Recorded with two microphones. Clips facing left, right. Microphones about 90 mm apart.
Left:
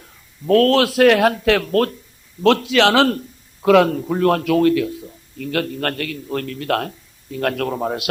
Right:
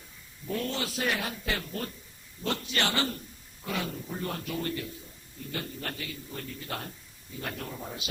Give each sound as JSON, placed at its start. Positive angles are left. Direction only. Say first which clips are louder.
{"t": 0.4, "sound": "speech", "louder": "left 19 dB", "side_deg": 90}
{"t": 2.4, "sound": "a man's voice", "louder": "left 16 dB", "side_deg": 90}
{"t": 5.4, "sound": "a man's voice", "louder": "left 15 dB", "side_deg": 80}